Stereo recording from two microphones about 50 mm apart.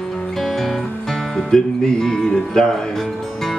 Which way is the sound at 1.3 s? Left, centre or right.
Centre.